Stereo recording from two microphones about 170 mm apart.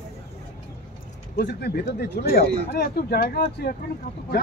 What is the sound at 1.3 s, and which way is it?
Speech, 70° left (ahead or behind).